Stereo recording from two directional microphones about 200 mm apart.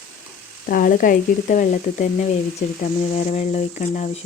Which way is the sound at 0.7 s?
45° left (ahead or behind).